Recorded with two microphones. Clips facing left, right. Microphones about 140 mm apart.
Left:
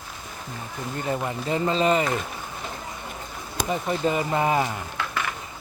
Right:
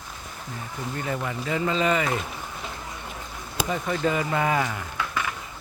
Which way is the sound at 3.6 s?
20° left (ahead or behind).